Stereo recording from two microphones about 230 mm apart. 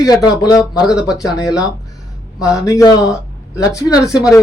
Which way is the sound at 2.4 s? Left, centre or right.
Centre.